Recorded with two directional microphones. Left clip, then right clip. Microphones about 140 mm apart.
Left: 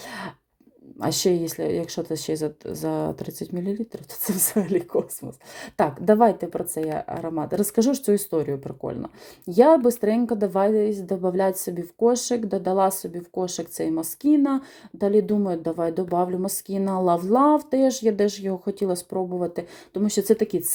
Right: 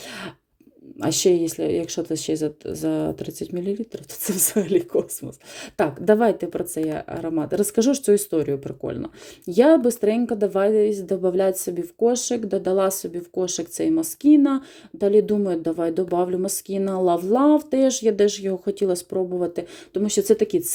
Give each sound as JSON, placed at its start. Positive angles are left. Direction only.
{"t": 0.1, "sound": "throat clearing", "side_deg": -20}
{"t": 0.9, "sound": "speech", "side_deg": -20}